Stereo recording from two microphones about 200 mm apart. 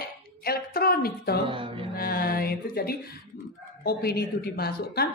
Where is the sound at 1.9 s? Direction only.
50° left (ahead or behind).